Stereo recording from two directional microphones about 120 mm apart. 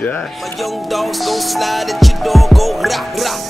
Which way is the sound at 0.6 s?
Centre (ahead or behind).